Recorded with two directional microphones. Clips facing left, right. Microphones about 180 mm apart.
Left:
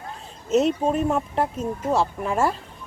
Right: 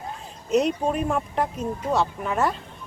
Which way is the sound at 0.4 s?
Centre (ahead or behind).